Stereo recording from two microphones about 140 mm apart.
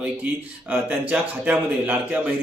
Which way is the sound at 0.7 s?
10° right (ahead or behind).